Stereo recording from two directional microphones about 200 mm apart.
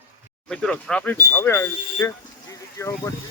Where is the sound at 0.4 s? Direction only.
5° left (ahead or behind).